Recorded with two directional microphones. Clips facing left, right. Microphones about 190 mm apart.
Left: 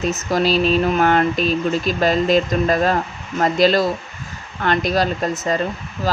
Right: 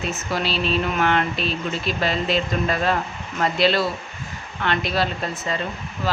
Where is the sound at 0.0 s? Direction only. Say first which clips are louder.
Left 7 dB; 40° left (ahead or behind).